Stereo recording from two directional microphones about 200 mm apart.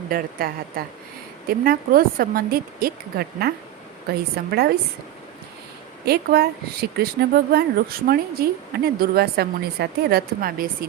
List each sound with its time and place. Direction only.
0.1 s speech: 45° right (ahead or behind)
6.1 s speech: 50° right (ahead or behind)